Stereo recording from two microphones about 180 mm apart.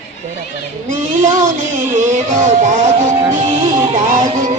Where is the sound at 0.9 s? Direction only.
45° right (ahead or behind).